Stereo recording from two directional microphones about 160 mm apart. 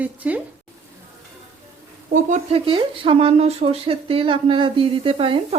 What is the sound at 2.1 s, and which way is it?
Speech, 50° right (ahead or behind).